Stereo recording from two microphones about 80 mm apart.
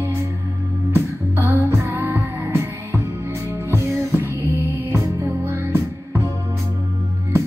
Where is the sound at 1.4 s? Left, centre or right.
Right.